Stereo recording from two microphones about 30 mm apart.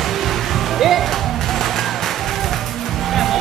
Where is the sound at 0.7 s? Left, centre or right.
Centre.